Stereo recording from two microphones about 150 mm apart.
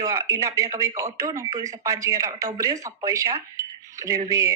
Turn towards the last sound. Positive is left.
turn(degrees=-20)  # may be behind; listen again after turning